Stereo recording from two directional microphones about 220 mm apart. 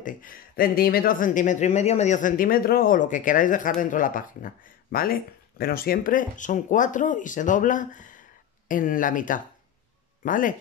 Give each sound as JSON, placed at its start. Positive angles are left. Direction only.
{"t": 0.0, "sound": "speech", "side_deg": 40}